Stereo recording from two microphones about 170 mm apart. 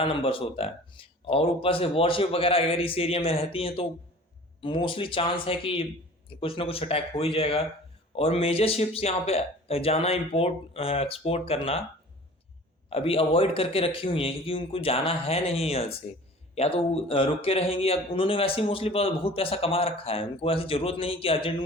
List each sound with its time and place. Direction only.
0.0 s a man's voice: 30° left (ahead or behind)
12.9 s a man's voice: 35° left (ahead or behind)